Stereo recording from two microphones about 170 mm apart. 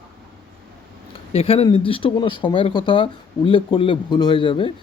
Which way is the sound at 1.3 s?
35° left (ahead or behind).